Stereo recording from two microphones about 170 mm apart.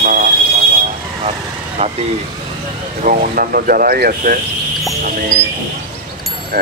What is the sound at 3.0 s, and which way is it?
Speech, 55° right (ahead or behind).